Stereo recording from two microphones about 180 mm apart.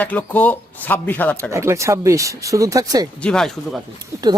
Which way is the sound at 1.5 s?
15° right (ahead or behind).